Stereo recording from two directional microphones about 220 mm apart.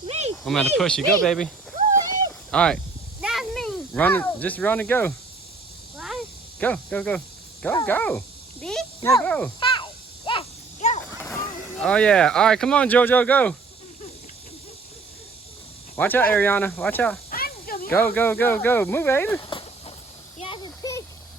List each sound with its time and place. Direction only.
0.0 s a sound: 30° right (ahead or behind)
0.4 s speech: 5° left (ahead or behind)
2.5 s snake: 5° left (ahead or behind)
7.6 s speech: 10° left (ahead or behind)
8.6 s a sound: 5° left (ahead or behind)
9.0 s speech: 20° left (ahead or behind)
9.2 s speech: 5° left (ahead or behind)
9.6 s a sound: 20° left (ahead or behind)
11.0 s speech: 10° left (ahead or behind)
16.0 s speech: 10° left (ahead or behind)
17.3 s snake: 40° left (ahead or behind)
17.8 s speech: 10° left (ahead or behind)
19.4 s a sound: 20° left (ahead or behind)